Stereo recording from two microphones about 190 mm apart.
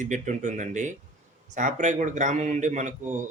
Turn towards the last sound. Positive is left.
turn(degrees=-40)  # may be behind; listen again after turning